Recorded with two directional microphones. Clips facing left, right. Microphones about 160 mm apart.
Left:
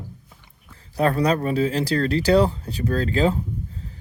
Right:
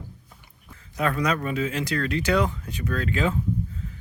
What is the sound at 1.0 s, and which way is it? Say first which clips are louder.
Speech: left 5 dB; 35° left (ahead or behind).